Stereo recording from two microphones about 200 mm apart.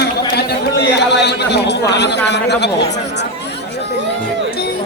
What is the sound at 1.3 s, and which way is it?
A man's voice, 55° left (ahead or behind).